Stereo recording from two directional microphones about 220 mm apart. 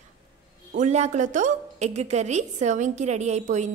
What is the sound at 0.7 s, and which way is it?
A woman's voice, 30° right (ahead or behind).